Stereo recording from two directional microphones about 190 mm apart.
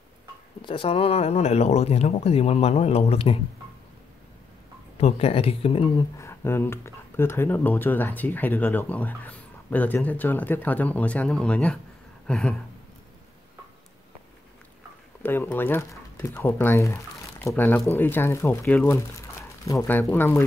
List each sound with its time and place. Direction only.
0.7 s speech: 30° left (ahead or behind)
5.0 s speech: 30° left (ahead or behind); by 11.8 s 5° left (ahead or behind)
12.3 s a sound: 5° left (ahead or behind)
15.2 s speech: 10° left (ahead or behind)